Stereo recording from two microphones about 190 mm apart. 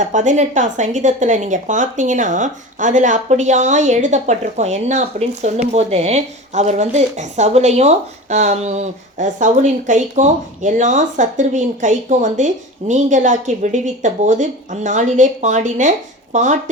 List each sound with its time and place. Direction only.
0.1 s speech: 40° right (ahead or behind)